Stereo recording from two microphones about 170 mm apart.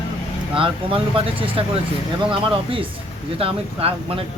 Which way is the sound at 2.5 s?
30° right (ahead or behind).